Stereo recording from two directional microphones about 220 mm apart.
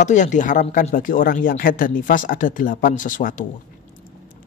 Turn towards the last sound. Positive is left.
turn(degrees=35)  # may be behind; listen again after turning